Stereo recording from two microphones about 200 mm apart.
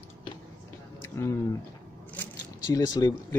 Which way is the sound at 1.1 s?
15° left (ahead or behind).